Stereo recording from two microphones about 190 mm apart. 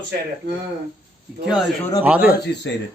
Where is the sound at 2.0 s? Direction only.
5° right (ahead or behind).